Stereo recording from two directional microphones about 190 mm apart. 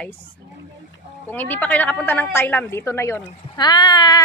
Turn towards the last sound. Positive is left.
turn(degrees=20)  # may be behind; listen again after turning